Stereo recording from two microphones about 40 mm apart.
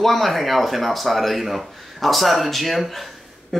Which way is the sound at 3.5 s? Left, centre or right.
Centre.